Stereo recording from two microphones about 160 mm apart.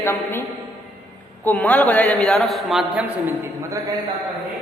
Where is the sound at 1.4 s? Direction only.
10° left (ahead or behind).